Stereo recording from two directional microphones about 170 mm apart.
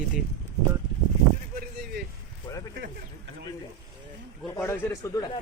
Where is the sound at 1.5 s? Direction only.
65° right (ahead or behind).